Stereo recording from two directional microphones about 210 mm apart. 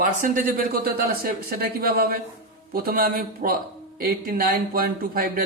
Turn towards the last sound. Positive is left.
turn(degrees=-45)  # may be behind; listen again after turning